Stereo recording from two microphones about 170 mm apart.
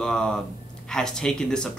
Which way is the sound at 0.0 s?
5° left (ahead or behind).